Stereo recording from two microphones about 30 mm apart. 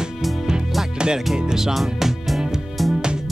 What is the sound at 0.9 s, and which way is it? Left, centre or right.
Music, right.